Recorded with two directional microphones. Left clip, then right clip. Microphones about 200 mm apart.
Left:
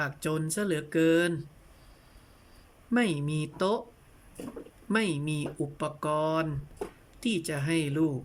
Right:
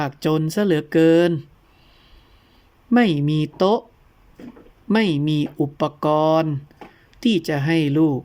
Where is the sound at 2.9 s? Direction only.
25° right (ahead or behind).